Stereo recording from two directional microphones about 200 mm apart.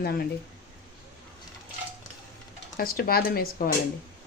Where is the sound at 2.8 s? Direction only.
50° left (ahead or behind).